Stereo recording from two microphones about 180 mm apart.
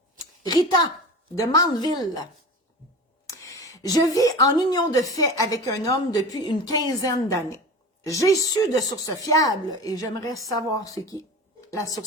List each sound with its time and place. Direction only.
0.4 s speech: 20° left (ahead or behind)
3.2 s a woman's voice: 20° left (ahead or behind)